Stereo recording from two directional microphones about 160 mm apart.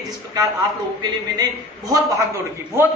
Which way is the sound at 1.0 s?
25° right (ahead or behind).